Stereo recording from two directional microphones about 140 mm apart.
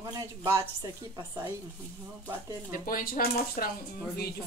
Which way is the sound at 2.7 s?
90° left.